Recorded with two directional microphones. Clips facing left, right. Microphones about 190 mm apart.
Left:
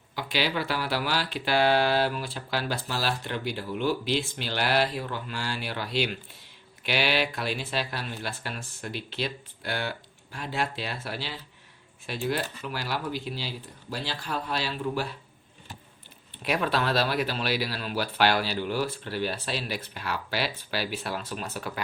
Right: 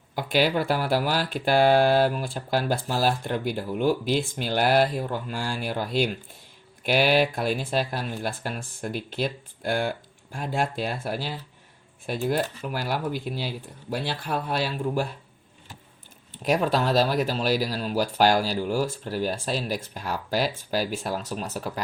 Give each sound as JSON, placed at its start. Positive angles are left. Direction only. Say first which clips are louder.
{"t": 0.2, "sound": "speech", "louder": "right 6 dB", "side_deg": -50}
{"t": 16.4, "sound": "speech", "louder": "right 4 dB", "side_deg": -45}